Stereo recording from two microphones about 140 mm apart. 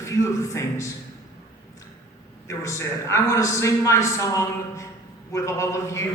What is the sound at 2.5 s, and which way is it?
A man's voice, 20° left (ahead or behind).